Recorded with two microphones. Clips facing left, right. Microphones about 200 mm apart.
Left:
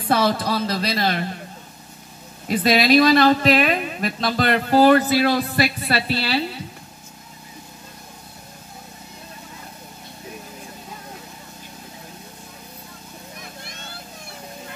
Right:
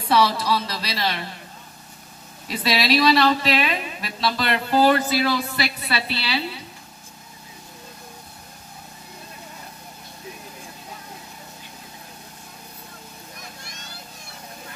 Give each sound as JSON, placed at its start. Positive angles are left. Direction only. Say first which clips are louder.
{"t": 0.1, "sound": "a woman's voice", "louder": "even", "side_deg": 50}
{"t": 2.4, "sound": "a woman's voice", "louder": "left 6 dB", "side_deg": 50}